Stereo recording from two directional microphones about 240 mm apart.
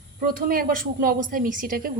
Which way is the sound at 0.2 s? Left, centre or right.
Right.